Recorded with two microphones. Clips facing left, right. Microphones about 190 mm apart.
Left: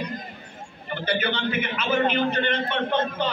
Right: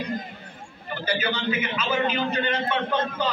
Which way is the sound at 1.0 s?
55° left (ahead or behind).